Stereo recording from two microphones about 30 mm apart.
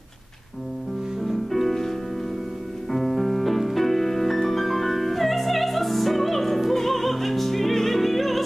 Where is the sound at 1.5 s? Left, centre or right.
Centre.